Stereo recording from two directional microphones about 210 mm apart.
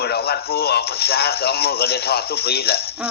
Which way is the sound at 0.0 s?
50° left (ahead or behind).